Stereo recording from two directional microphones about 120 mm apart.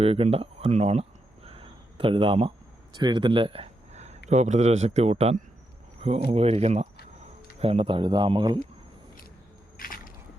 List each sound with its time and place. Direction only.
0.0 s speech: 55° right (ahead or behind)
1.5 s a sound: 50° right (ahead or behind)
2.9 s speech: 40° right (ahead or behind)